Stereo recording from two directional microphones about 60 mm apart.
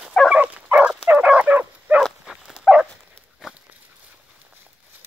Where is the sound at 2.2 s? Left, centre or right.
Centre.